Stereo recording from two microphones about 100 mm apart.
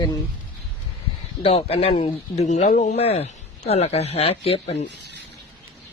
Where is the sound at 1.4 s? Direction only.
80° left.